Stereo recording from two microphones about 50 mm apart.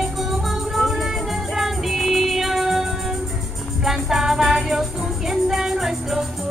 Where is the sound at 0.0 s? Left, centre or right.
Centre.